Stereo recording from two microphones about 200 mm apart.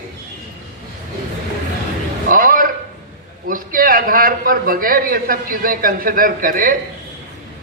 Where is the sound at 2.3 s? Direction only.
45° right (ahead or behind).